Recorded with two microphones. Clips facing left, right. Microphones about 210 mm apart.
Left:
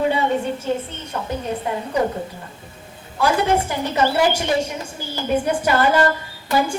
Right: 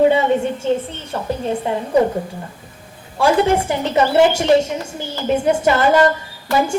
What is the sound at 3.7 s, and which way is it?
A woman's voice, 25° right (ahead or behind).